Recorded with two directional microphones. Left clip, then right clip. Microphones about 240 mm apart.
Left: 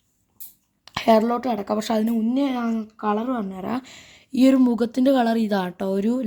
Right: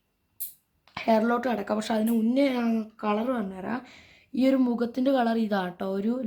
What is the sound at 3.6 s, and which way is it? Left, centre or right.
Speech, left.